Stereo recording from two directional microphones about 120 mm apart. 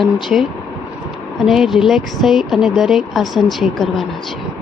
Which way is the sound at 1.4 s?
Centre (ahead or behind).